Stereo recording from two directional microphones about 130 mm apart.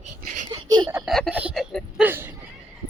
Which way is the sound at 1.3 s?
10° right (ahead or behind).